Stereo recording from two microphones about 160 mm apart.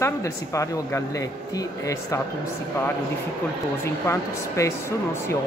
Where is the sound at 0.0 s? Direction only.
15° left (ahead or behind).